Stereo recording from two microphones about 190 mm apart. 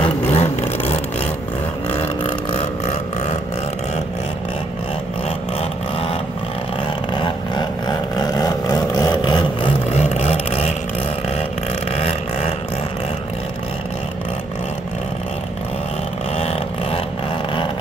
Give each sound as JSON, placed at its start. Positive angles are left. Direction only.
{"t": 0.0, "sound": "vehicle", "side_deg": 35}
{"t": 2.5, "sound": "burping", "side_deg": 35}
{"t": 7.2, "sound": "a sound", "side_deg": 25}